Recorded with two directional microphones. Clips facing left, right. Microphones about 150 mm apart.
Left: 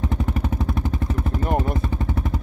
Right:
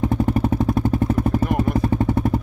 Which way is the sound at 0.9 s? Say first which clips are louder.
Right 7 dB; 45° right (ahead or behind).